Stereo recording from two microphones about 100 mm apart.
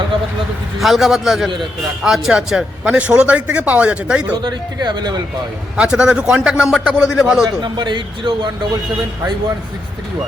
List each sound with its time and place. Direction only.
0.8 s a man's voice: centre (ahead or behind)
4.4 s speech: 45° right (ahead or behind)
5.7 s a man's voice: 10° right (ahead or behind)
7.6 s speech: 50° right (ahead or behind)